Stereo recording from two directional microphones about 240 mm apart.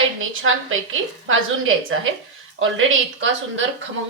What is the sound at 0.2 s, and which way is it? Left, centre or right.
A woman's voice, right.